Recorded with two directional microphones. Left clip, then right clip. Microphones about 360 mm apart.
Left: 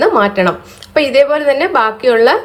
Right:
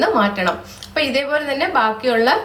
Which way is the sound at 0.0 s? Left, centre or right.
Centre.